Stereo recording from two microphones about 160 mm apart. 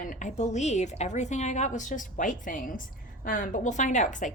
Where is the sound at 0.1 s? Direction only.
50° left (ahead or behind).